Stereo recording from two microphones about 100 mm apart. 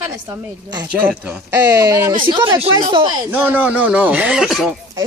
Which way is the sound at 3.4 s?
20° right (ahead or behind).